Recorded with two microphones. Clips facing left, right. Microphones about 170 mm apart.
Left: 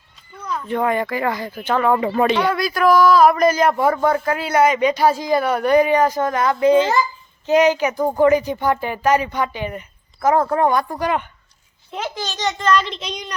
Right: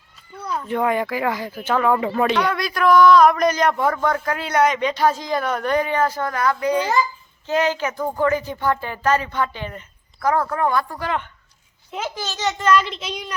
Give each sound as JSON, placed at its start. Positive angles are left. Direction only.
{"t": 0.4, "sound": "speech", "side_deg": -5}
{"t": 11.9, "sound": "speech", "side_deg": -10}